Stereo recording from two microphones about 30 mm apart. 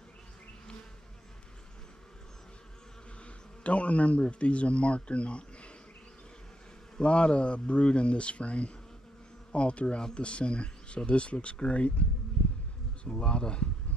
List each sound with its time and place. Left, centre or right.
3.6 s speech: left
7.0 s speech: left
13.0 s speech: left